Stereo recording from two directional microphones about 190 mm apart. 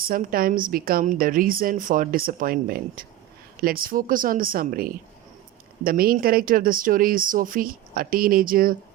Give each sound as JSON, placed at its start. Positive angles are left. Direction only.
{"t": 0.0, "sound": "a woman's voice", "side_deg": -50}